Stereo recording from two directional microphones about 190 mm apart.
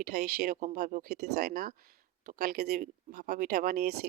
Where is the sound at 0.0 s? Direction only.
50° right (ahead or behind).